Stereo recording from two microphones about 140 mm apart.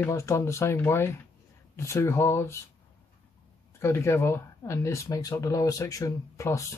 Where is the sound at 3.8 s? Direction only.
20° left (ahead or behind).